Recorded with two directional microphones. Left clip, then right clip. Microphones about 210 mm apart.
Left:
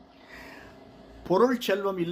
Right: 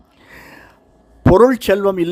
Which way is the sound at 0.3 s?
55° right (ahead or behind).